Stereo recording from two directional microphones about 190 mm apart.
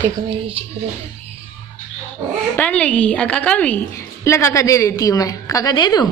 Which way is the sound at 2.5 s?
5° left (ahead or behind).